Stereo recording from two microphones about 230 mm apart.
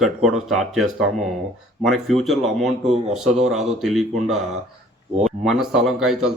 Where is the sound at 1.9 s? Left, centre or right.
Centre.